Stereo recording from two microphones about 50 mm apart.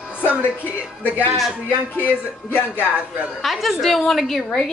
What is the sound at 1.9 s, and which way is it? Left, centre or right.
Speech, left.